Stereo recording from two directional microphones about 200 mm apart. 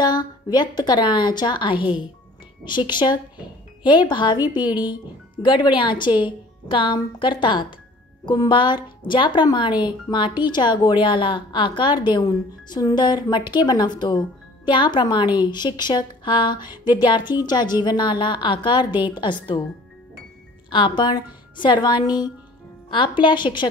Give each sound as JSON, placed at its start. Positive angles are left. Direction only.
{"t": 0.0, "sound": "speech", "side_deg": 20}
{"t": 20.7, "sound": "speech", "side_deg": 25}